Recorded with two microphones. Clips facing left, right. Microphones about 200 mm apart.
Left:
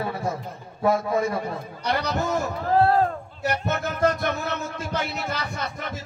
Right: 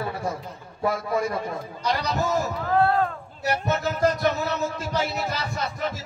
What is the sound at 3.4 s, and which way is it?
Speech, 55° left (ahead or behind).